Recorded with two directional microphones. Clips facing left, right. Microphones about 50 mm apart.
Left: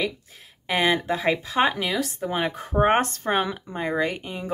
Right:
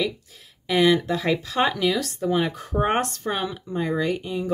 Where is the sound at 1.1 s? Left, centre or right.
Left.